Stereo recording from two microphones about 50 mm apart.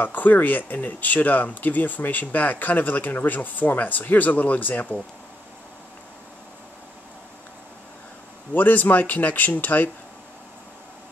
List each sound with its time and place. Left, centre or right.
0.0 s speech: left
8.5 s speech: left